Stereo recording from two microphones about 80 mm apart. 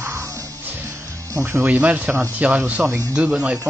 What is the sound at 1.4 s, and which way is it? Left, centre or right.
Speech, centre.